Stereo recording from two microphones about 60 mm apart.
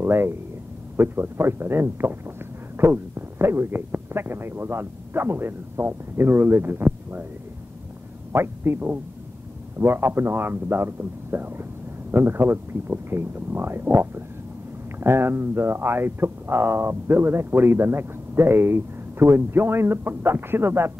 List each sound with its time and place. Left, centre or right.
0.0 s speech: right
8.3 s a man's voice: right